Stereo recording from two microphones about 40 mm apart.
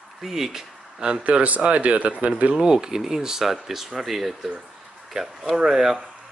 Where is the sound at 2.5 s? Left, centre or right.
Centre.